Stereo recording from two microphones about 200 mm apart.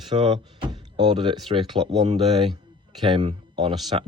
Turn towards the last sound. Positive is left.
turn(degrees=-25)  # may be behind; listen again after turning